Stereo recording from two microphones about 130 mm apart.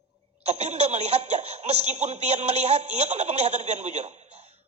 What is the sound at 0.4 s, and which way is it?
Speech, 60° right (ahead or behind).